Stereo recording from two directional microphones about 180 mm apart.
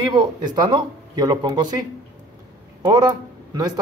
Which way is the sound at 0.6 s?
20° right (ahead or behind).